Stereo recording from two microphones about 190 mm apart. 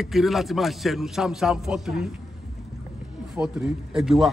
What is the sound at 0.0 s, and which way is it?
Speech, centre (ahead or behind).